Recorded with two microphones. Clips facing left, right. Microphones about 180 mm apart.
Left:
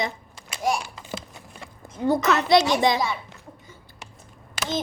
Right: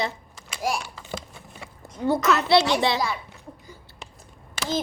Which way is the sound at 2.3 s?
15° left (ahead or behind).